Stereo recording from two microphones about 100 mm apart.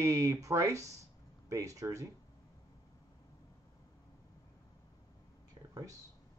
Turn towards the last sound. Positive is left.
turn(degrees=-35)  # may be behind; listen again after turning